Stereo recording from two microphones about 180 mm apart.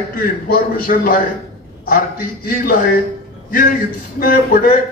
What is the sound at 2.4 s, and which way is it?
Speech, 50° left (ahead or behind).